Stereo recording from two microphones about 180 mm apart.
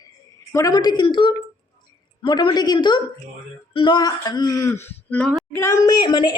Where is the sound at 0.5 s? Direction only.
20° left (ahead or behind).